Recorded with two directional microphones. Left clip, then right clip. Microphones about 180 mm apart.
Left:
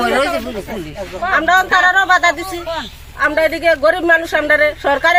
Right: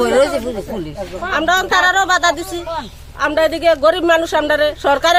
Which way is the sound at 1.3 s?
30° right (ahead or behind).